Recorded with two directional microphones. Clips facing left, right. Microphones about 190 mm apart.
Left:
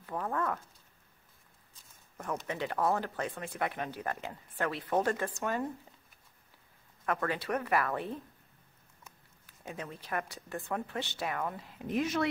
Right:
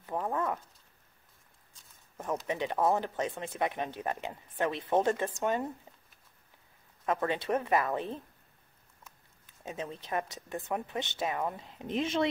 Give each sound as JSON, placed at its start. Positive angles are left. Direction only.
{"t": 0.0, "sound": "a sound", "side_deg": -20}
{"t": 2.1, "sound": "speech", "side_deg": -20}
{"t": 7.1, "sound": "speech", "side_deg": -20}
{"t": 9.5, "sound": "speech", "side_deg": -20}